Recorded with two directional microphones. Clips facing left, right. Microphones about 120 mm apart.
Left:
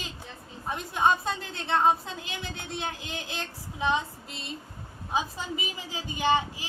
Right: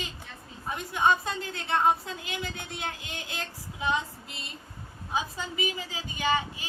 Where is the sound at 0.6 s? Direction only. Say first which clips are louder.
Even; 30° left (ahead or behind).